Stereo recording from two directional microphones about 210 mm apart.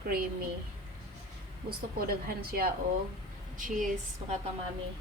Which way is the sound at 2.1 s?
45° right (ahead or behind).